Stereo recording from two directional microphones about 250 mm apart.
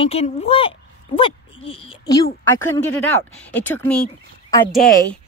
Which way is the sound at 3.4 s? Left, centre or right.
Centre.